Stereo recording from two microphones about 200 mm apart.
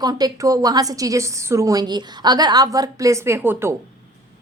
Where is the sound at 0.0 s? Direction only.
20° right (ahead or behind).